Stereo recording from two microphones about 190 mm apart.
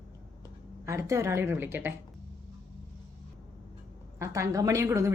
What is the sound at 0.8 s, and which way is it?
A woman's voice, 15° right (ahead or behind).